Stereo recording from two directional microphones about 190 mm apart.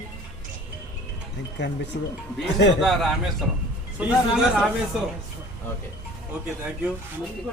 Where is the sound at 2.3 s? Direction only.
Centre (ahead or behind).